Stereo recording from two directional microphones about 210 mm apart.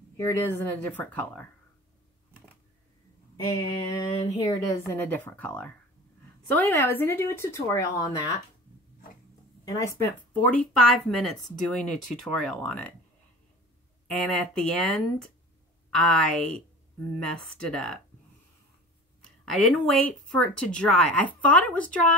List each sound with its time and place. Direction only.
0.4 s speech: 10° left (ahead or behind)
3.4 s speech: 15° left (ahead or behind)
9.7 s speech: 15° left (ahead or behind)
14.1 s speech: 5° left (ahead or behind)
19.5 s speech: centre (ahead or behind)